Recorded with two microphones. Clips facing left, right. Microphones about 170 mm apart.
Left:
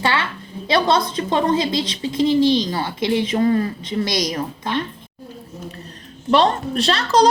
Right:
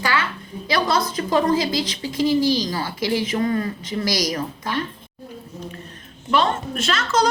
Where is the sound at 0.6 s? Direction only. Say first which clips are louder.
Left 3 dB; 25° left (ahead or behind).